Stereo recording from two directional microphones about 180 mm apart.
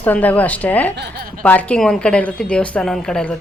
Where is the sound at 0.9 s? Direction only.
70° right (ahead or behind).